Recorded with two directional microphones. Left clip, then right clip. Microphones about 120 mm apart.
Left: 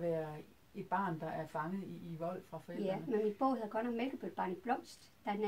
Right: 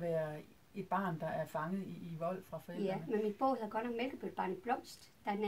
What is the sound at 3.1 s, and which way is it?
Speech, 20° left (ahead or behind).